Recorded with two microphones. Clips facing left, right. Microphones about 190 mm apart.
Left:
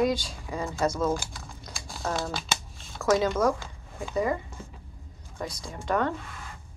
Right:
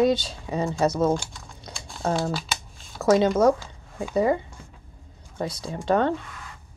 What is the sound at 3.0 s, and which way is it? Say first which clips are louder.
Speech: right 5 dB; 25° right (ahead or behind).